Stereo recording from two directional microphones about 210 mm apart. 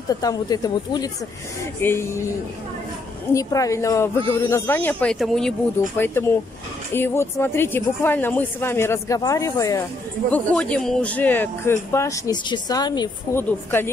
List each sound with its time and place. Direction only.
0.1 s speech: 15° left (ahead or behind)
3.3 s speech: 15° left (ahead or behind)
10.3 s speech: 5° left (ahead or behind)